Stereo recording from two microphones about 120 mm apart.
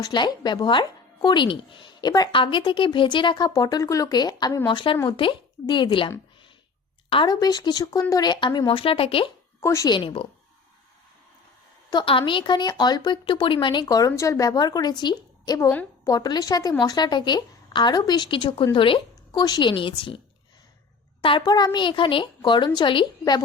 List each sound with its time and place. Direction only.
0.0 s speech: 35° left (ahead or behind)
7.1 s speech: 45° left (ahead or behind)
7.3 s speech: 35° left (ahead or behind); by 9.3 s 50° left (ahead or behind)
9.6 s speech: 25° left (ahead or behind)
9.9 s speech: 45° left (ahead or behind)
11.9 s speech: 45° left (ahead or behind)
13.8 s speech: 30° left (ahead or behind)